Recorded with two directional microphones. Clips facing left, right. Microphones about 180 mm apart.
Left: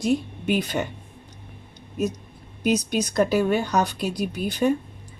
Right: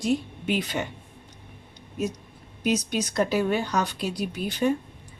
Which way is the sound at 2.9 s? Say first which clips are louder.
Left 3 dB; 45° left (ahead or behind).